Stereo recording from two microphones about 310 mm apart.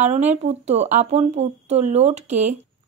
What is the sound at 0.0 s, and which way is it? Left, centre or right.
A woman's voice, right.